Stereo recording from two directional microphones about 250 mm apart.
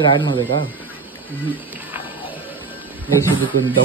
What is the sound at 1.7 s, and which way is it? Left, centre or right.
Music, centre.